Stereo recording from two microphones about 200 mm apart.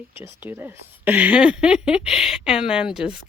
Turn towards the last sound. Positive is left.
turn(degrees=-5)  # may be behind; listen again after turning